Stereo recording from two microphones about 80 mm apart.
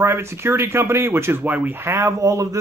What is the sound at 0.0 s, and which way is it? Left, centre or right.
Speech, right.